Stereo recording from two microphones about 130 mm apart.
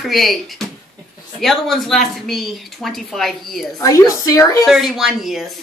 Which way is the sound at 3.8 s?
25° left (ahead or behind).